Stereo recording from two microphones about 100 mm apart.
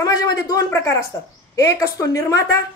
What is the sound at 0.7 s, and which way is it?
A woman's voice, 25° left (ahead or behind).